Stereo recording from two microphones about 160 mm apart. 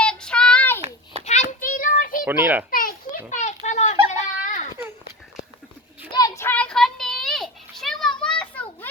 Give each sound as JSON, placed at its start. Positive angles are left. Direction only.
{"t": 0.0, "sound": "child singing", "side_deg": 5}
{"t": 1.2, "sound": "a sound", "side_deg": 50}
{"t": 2.2, "sound": "a child's voice", "side_deg": -10}
{"t": 2.6, "sound": "children playing", "side_deg": 65}
{"t": 3.2, "sound": "a sound", "side_deg": 50}
{"t": 4.1, "sound": "children playing", "side_deg": 50}
{"t": 6.1, "sound": "children playing", "side_deg": 25}